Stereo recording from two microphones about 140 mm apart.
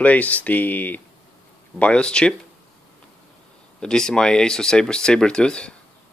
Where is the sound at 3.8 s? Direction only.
5° left (ahead or behind).